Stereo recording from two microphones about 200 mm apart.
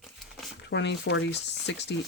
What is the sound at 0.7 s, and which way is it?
Speech, 60° left (ahead or behind).